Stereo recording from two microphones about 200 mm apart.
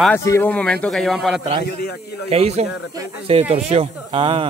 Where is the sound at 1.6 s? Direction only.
55° left (ahead or behind).